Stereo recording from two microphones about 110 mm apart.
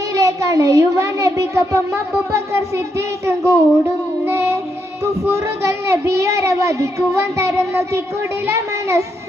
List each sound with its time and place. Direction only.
0.1 s speech: 30° right (ahead or behind)
4.3 s child singing: 25° right (ahead or behind)
5.2 s speech: 25° right (ahead or behind)